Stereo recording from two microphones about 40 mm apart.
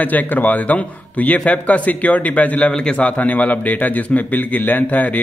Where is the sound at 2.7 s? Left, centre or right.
Centre.